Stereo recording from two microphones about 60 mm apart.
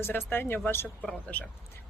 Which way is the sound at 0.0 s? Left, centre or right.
Left.